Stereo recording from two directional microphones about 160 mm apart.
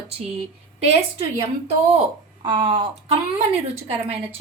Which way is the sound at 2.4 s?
30° right (ahead or behind).